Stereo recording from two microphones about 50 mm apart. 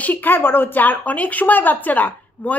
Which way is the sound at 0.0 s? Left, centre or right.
Left.